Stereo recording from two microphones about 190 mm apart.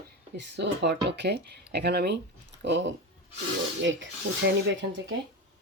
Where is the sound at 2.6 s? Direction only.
70° right (ahead or behind).